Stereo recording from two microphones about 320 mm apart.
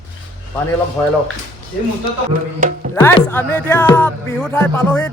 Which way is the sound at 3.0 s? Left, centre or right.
Centre.